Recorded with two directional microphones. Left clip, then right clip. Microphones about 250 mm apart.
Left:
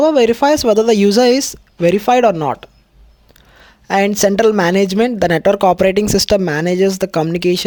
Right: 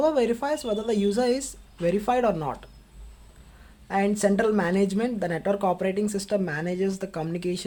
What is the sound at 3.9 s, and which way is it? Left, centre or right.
A woman's voice, left.